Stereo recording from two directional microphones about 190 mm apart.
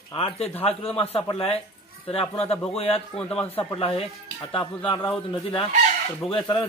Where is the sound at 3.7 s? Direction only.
30° left (ahead or behind).